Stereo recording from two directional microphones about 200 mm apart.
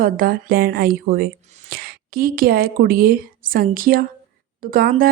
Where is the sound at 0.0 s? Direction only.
45° right (ahead or behind).